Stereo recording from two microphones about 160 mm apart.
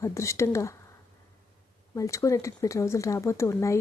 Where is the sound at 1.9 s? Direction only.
20° left (ahead or behind).